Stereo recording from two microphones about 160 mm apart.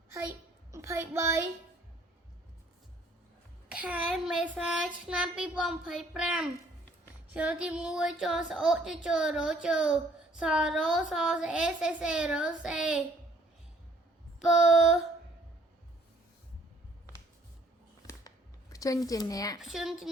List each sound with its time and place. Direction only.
0.7 s child singing: 20° right (ahead or behind)
3.7 s a woman's voice: 10° right (ahead or behind)
14.7 s a woman's voice: 5° right (ahead or behind)
18.0 s music: 20° left (ahead or behind)
18.7 s speech: 20° left (ahead or behind)
19.5 s a woman's voice: centre (ahead or behind)